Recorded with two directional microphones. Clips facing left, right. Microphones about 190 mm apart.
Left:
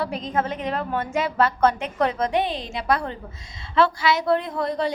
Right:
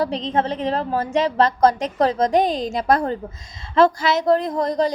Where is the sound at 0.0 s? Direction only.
30° right (ahead or behind).